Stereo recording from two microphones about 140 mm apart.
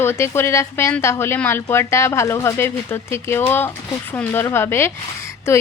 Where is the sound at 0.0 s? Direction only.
15° left (ahead or behind).